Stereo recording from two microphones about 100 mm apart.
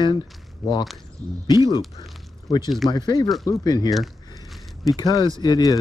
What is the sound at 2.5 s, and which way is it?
Speech, 45° left (ahead or behind).